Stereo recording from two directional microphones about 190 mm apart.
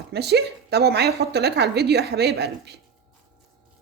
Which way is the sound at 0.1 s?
60° right (ahead or behind).